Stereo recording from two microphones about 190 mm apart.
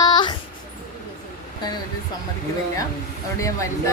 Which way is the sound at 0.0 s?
20° left (ahead or behind).